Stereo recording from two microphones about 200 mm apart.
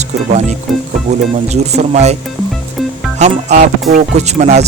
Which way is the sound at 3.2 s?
35° right (ahead or behind).